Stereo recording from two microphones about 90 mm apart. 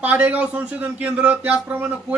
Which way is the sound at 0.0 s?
15° right (ahead or behind).